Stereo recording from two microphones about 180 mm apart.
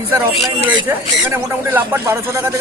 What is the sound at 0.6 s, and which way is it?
Speech, 10° right (ahead or behind).